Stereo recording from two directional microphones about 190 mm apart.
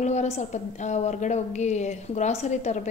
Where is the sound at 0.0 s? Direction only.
40° left (ahead or behind).